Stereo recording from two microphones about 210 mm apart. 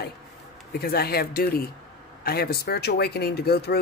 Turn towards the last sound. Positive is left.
turn(degrees=50)  # may be behind; listen again after turning